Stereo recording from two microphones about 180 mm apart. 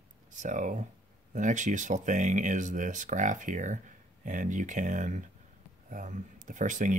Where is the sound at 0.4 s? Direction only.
45° right (ahead or behind).